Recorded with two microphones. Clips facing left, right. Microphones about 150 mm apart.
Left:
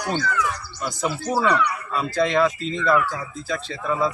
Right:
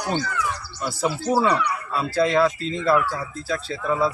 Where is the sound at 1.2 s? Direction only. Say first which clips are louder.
Even; 15° right (ahead or behind).